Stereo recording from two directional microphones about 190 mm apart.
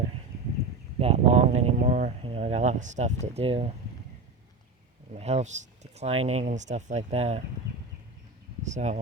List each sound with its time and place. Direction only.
0.9 s speech: 30° right (ahead or behind)
5.1 s speech: 35° right (ahead or behind)
8.6 s speech: 40° right (ahead or behind)